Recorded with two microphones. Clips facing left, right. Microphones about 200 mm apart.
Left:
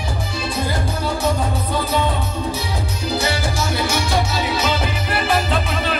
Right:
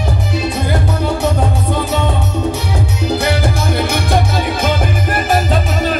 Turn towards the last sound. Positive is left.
turn(degrees=-45)  # may be behind; listen again after turning